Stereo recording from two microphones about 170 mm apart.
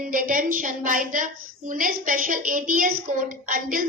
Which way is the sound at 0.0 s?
55° right (ahead or behind).